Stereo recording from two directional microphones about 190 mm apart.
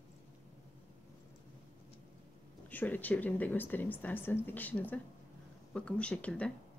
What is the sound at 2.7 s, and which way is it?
Speech, 10° left (ahead or behind).